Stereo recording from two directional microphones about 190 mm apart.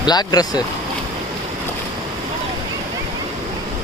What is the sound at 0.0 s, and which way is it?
Speech, 20° left (ahead or behind).